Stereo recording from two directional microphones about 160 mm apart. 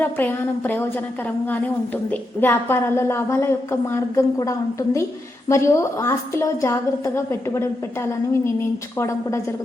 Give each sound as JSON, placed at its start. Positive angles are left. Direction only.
{"t": 0.0, "sound": "a woman's voice", "side_deg": 10}
{"t": 9.0, "sound": "a woman's voice", "side_deg": 20}